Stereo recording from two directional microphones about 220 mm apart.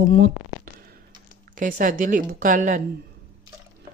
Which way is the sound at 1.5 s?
40° right (ahead or behind).